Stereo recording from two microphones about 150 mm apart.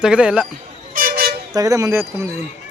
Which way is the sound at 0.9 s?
75° right (ahead or behind).